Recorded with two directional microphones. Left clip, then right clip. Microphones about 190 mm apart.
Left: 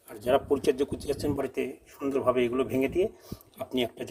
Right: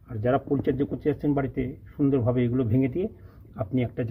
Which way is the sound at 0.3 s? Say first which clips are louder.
Even; 10° left (ahead or behind).